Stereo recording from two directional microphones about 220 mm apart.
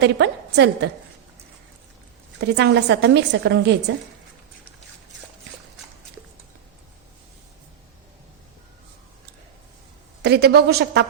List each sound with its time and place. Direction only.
0.0 s a woman's voice: 50° right (ahead or behind)
2.4 s a woman's voice: 50° right (ahead or behind)
10.2 s a woman's voice: 45° right (ahead or behind)